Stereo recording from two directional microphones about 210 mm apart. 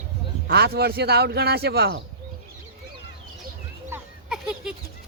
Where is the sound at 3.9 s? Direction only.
5° right (ahead or behind).